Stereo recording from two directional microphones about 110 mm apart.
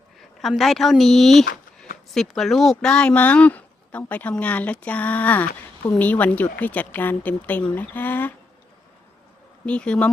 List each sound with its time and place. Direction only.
0.2 s speech: centre (ahead or behind); by 8.3 s 15° left (ahead or behind)
9.6 s speech: 10° left (ahead or behind)